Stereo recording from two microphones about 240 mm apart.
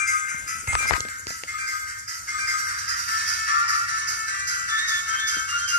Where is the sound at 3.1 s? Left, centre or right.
Left.